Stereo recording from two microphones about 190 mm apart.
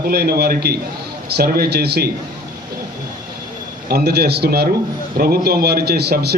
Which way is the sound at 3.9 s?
55° right (ahead or behind).